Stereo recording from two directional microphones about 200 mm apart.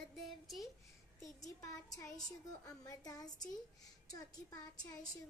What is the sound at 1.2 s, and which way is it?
A child's voice, 15° left (ahead or behind).